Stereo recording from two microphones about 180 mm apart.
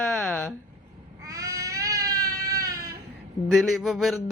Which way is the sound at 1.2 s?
20° right (ahead or behind).